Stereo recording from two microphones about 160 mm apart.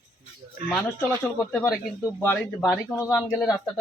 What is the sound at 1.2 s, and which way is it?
Speech, 15° left (ahead or behind).